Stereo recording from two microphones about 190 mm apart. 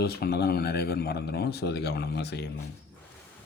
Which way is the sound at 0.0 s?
55° left (ahead or behind).